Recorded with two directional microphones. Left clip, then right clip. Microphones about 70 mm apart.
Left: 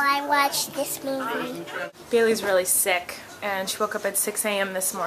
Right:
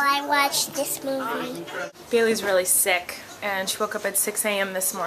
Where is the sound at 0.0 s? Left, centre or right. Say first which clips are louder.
Even; centre.